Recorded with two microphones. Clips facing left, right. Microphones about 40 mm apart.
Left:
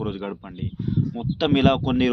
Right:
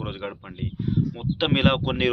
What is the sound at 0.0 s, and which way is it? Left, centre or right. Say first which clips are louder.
Speech: left 3 dB; right.